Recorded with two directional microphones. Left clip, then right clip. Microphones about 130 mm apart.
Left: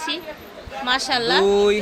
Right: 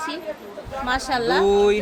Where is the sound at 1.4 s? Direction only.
35° left (ahead or behind).